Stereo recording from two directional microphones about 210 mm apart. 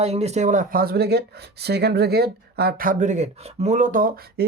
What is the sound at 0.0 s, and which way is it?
Speech, 30° right (ahead or behind).